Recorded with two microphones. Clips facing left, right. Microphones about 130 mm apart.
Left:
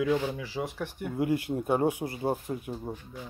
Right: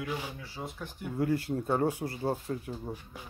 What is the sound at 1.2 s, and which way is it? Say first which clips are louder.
Speech: left 1 dB; 15° left (ahead or behind).